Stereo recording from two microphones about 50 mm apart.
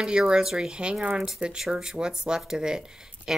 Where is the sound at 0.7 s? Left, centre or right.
Right.